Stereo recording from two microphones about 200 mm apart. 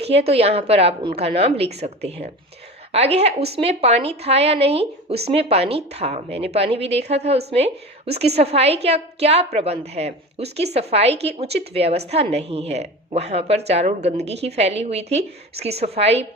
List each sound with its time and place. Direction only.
0.0 s speech: 30° right (ahead or behind)